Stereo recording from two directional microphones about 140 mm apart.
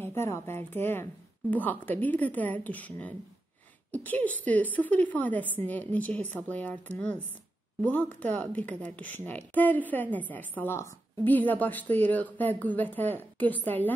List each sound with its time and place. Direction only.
0.0 s a woman's voice: 15° left (ahead or behind)